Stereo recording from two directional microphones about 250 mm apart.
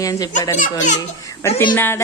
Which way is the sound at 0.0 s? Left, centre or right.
Centre.